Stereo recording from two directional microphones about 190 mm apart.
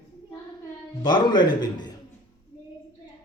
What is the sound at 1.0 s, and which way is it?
Speech, 25° left (ahead or behind).